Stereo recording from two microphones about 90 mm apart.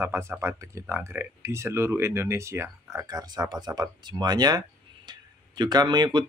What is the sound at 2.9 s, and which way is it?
Speech, 40° right (ahead or behind).